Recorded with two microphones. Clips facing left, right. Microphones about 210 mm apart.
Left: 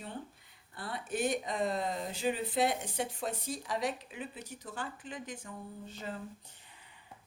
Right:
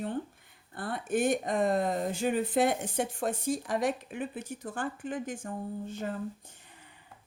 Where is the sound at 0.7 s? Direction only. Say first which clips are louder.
Right 6 dB; 50° right (ahead or behind).